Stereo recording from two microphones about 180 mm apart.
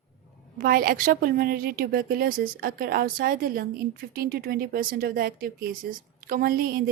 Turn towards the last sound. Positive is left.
turn(degrees=-55)  # may be behind; listen again after turning